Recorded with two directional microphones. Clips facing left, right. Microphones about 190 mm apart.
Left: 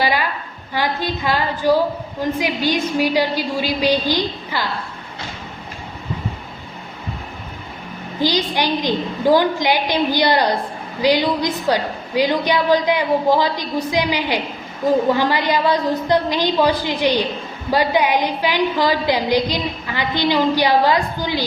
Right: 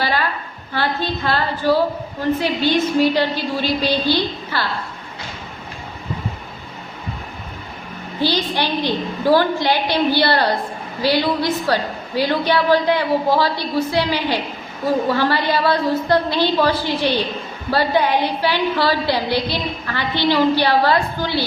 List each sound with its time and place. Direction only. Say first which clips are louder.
0.0 s a woman's voice: left 1 dB; 15° left (ahead or behind)
8.2 s a woman's voice: left 1 dB; 15° left (ahead or behind)